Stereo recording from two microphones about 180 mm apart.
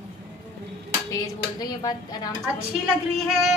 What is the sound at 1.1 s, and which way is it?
Speech, 20° left (ahead or behind).